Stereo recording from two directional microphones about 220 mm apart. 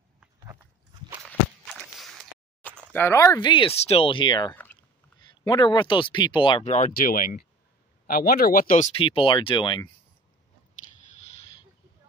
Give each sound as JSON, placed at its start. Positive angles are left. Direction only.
{"t": 1.2, "sound": "walk", "side_deg": 0}
{"t": 2.9, "sound": "speech", "side_deg": 10}